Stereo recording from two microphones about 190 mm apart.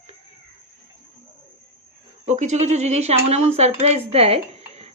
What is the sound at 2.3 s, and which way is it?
Speech, 40° right (ahead or behind).